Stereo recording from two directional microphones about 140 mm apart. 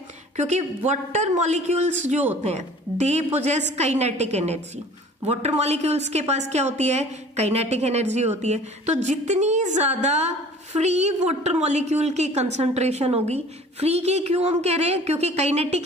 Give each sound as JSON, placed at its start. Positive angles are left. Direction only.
{"t": 0.4, "sound": "a woman's voice", "side_deg": -55}